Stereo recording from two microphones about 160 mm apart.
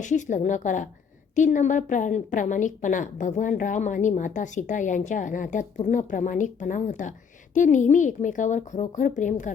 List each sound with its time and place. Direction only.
0.0 s a woman's voice: 50° left (ahead or behind)